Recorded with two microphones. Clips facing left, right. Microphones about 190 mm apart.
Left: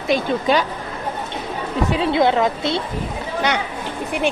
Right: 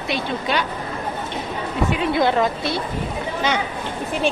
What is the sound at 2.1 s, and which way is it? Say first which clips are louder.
Speech: left 2 dB; 20° left (ahead or behind).